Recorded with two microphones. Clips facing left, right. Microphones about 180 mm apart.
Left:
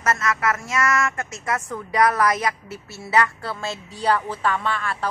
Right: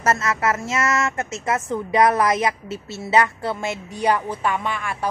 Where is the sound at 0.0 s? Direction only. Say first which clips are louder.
Right 2 dB; 25° right (ahead or behind).